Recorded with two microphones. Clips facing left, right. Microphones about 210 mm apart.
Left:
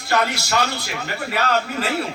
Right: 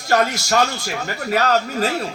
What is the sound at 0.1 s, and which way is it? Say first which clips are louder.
A man's voice: right 3 dB; 45° right (ahead or behind).